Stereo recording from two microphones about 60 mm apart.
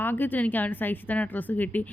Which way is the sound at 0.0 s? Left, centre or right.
Left.